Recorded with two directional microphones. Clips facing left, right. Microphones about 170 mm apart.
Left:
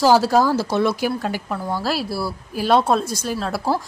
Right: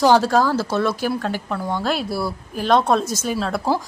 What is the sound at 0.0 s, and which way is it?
A woman's voice, 10° left (ahead or behind).